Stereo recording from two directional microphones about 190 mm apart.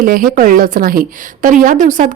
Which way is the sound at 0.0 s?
45° right (ahead or behind).